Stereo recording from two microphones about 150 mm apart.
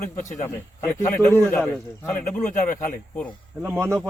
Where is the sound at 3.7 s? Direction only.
15° right (ahead or behind).